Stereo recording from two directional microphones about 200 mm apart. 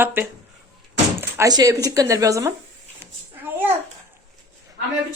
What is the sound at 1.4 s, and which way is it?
Speech, 20° right (ahead or behind).